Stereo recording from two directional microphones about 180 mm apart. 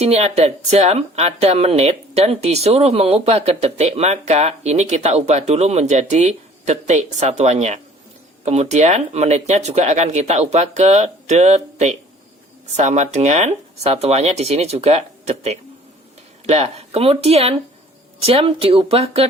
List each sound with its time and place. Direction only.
0.0 s speech: 35° right (ahead or behind)